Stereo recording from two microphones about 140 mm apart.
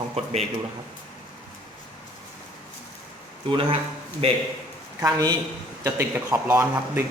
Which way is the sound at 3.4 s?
40° right (ahead or behind).